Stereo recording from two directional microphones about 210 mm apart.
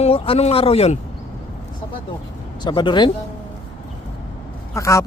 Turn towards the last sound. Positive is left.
turn(degrees=15)  # may be behind; listen again after turning